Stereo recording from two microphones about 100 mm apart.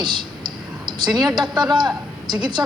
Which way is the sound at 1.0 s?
45° right (ahead or behind).